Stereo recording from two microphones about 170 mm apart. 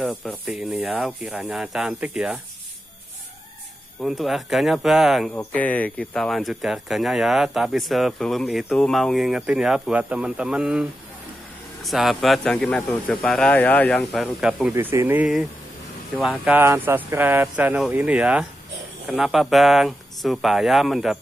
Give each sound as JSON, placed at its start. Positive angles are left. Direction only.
{"t": 0.2, "sound": "speech", "side_deg": 0}
{"t": 4.0, "sound": "speech", "side_deg": 0}
{"t": 5.3, "sound": "speech", "side_deg": 10}
{"t": 14.7, "sound": "speech", "side_deg": -15}